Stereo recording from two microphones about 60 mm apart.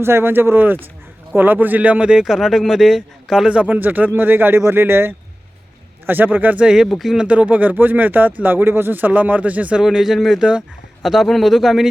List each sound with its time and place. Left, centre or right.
0.0 s speech: right; by 3.5 s centre
3.5 s speech: right
6.8 s speech: centre
7.2 s speech: right
9.8 s speech: centre